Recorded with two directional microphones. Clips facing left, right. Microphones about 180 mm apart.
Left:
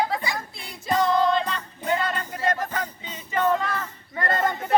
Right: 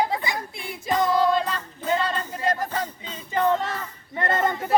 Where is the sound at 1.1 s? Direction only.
5° right (ahead or behind).